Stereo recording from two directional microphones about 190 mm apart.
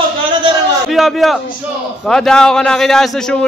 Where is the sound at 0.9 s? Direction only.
Centre (ahead or behind).